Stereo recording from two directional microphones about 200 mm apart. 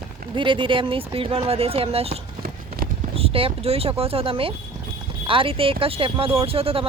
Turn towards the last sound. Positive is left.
turn(degrees=-30)  # may be behind; listen again after turning